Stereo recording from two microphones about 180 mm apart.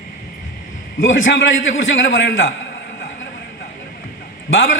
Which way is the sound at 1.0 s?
90° left.